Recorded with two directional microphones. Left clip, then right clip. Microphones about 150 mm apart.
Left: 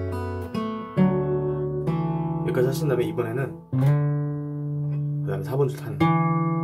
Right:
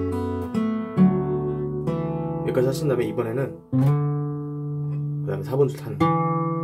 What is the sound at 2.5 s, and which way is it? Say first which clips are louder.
Speech: right 1 dB; centre (ahead or behind).